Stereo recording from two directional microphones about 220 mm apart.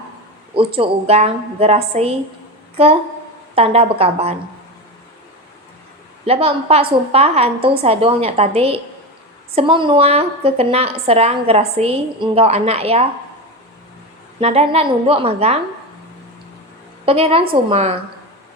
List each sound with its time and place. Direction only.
0.5 s a woman's voice: 25° right (ahead or behind)
3.5 s a woman's voice: 25° right (ahead or behind)
6.2 s a woman's voice: 25° right (ahead or behind)
14.4 s a woman's voice: 25° right (ahead or behind)
17.1 s a woman's voice: 25° right (ahead or behind)